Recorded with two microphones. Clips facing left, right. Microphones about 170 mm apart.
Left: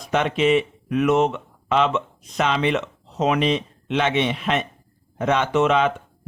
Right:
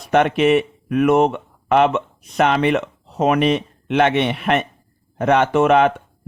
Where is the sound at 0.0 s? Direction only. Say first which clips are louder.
Right 5 dB; 60° right (ahead or behind).